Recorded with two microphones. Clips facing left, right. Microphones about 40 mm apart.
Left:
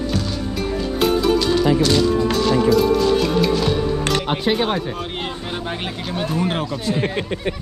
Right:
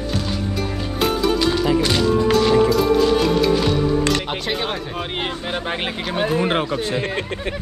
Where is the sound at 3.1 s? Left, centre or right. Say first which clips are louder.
Right 1 dB; centre.